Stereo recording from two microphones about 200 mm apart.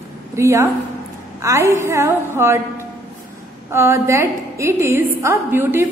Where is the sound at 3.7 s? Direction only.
10° right (ahead or behind).